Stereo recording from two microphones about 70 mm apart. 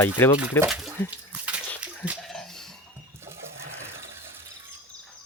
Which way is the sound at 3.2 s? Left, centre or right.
Right.